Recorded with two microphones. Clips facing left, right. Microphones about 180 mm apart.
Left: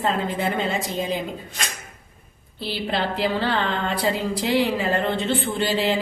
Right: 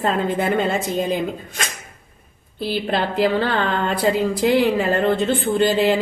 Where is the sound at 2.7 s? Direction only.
50° right (ahead or behind).